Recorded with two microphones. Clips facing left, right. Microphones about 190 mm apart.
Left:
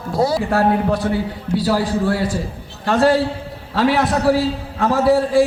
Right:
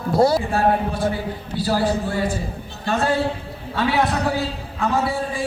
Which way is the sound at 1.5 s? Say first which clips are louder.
Left 3 dB; 80° left.